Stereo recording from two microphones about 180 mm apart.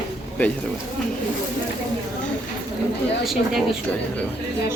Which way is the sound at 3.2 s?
Centre (ahead or behind).